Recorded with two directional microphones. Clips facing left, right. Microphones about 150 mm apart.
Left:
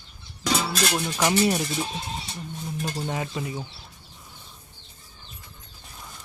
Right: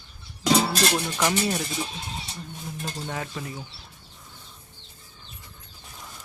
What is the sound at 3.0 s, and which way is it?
Speech, 20° left (ahead or behind).